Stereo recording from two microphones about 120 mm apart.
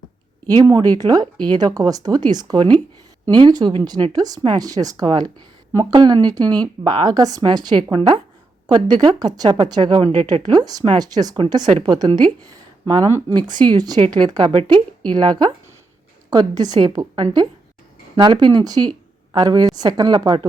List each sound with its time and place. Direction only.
0.4 s speech: 30° right (ahead or behind)
14.5 s a woman's voice: 50° right (ahead or behind)
15.1 s speech: 35° right (ahead or behind)